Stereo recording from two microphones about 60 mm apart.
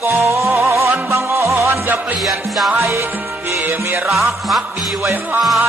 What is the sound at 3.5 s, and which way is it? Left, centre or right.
Music, right.